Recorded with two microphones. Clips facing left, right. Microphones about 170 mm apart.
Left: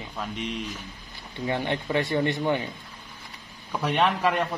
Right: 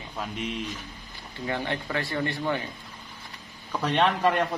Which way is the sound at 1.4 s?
20° left (ahead or behind).